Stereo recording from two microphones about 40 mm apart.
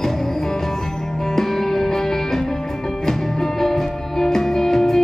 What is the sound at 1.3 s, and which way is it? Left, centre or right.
Music, centre.